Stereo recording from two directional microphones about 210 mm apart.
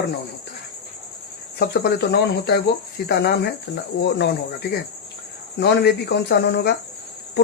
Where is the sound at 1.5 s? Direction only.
50° left (ahead or behind).